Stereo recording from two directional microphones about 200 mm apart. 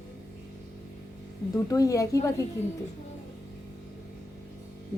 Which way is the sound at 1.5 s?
15° left (ahead or behind).